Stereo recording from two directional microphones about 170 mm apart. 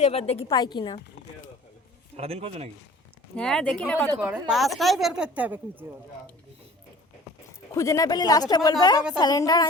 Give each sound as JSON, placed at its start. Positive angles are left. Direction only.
{"t": 0.0, "sound": "a woman's voice", "side_deg": 35}
{"t": 0.5, "sound": "speech", "side_deg": 25}
{"t": 2.1, "sound": "a man's voice", "side_deg": -35}
{"t": 3.3, "sound": "speech", "side_deg": 5}
{"t": 4.2, "sound": "a woman's voice", "side_deg": -5}
{"t": 7.8, "sound": "speech", "side_deg": 20}